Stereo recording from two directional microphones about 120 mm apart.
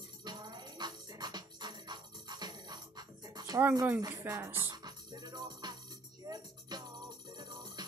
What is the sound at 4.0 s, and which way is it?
Speech, 30° right (ahead or behind).